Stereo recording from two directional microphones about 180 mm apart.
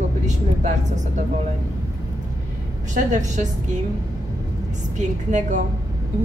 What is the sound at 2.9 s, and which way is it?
Speech, 45° right (ahead or behind).